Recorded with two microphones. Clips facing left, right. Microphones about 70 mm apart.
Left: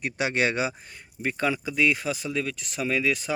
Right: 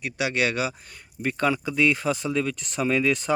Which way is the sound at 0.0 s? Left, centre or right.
Left.